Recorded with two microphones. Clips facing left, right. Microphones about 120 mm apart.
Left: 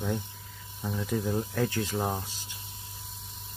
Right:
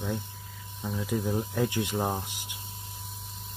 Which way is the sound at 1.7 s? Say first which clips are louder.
Right 1 dB; 15° right (ahead or behind).